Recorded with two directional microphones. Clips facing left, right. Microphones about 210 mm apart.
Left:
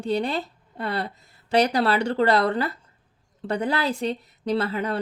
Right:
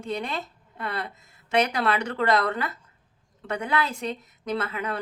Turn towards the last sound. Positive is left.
turn(degrees=35)  # may be behind; listen again after turning